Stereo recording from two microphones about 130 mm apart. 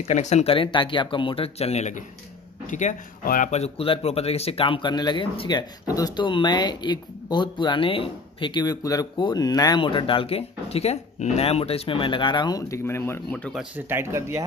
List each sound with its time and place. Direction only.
0.1 s speech: 60° left (ahead or behind); by 13.6 s 10° left (ahead or behind)
13.7 s speech: 15° right (ahead or behind)